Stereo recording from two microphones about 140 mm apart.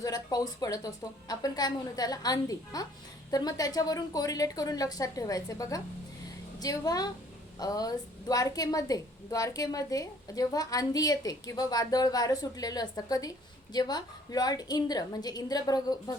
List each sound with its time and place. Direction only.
0.0 s a woman's voice: 25° left (ahead or behind)